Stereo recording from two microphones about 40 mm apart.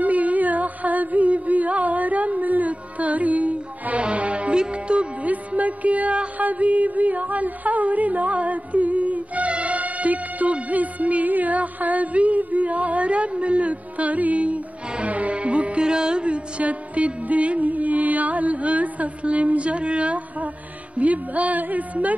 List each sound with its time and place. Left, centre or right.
0.0 s music: right
5.2 s music: right